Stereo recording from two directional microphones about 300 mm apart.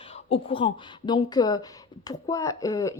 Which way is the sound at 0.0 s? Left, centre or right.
Centre.